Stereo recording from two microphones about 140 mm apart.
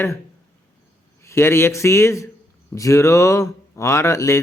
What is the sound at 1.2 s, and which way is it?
Speech, 20° left (ahead or behind).